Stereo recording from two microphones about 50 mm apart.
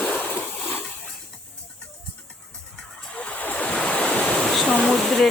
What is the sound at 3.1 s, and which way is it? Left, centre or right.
Waves, left.